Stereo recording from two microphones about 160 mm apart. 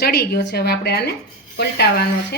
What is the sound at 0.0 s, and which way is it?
A woman's voice, 90° left.